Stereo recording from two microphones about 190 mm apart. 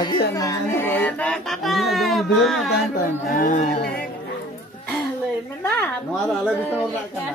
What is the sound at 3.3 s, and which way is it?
Speech, 45° left (ahead or behind).